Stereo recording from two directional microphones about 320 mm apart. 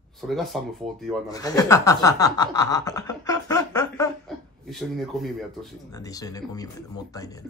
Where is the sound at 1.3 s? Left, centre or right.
Centre.